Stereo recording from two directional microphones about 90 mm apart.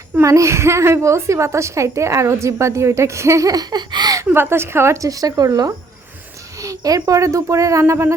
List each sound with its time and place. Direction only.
0.2 s a woman's voice: 35° right (ahead or behind)
4.3 s a woman's voice: 25° right (ahead or behind)